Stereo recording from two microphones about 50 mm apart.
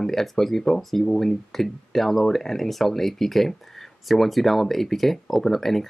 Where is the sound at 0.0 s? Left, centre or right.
Centre.